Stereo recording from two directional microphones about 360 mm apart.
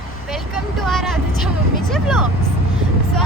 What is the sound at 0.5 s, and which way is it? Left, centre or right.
Vehicle, centre.